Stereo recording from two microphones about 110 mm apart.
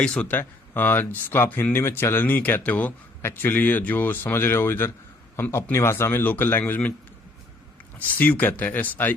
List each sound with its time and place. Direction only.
0.0 s speech: 10° left (ahead or behind)
7.9 s speech: 15° left (ahead or behind)